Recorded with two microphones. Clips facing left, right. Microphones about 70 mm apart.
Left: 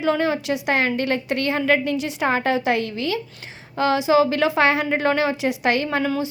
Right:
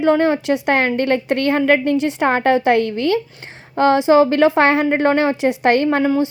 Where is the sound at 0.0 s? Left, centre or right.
Right.